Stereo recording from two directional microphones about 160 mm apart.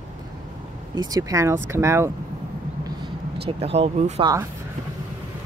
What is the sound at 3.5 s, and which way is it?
Speech, 40° right (ahead or behind).